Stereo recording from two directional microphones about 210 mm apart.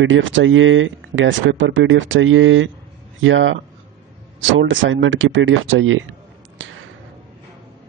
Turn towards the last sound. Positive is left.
turn(degrees=-65)  # may be behind; listen again after turning